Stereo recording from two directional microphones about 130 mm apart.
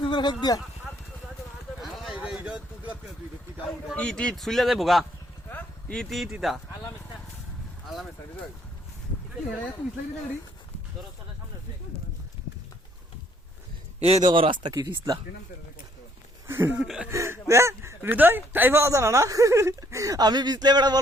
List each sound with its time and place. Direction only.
0.0 s a sound: 35° left (ahead or behind)
1.8 s a sound: centre (ahead or behind)
2.2 s speech: 10° right (ahead or behind)
3.9 s speech: 10° left (ahead or behind)
14.0 s speech: 55° right (ahead or behind)
14.3 s speech: 40° right (ahead or behind)
16.5 s speech: 15° right (ahead or behind)
16.8 s speech: centre (ahead or behind)
17.1 s speech: 20° right (ahead or behind)